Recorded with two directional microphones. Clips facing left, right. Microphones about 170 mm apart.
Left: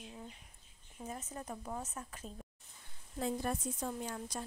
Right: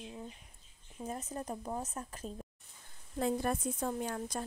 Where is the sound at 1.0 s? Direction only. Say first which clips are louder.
Right 4 dB; 35° right (ahead or behind).